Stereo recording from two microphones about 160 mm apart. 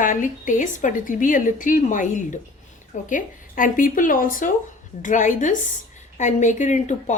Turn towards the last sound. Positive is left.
turn(degrees=50)  # may be behind; listen again after turning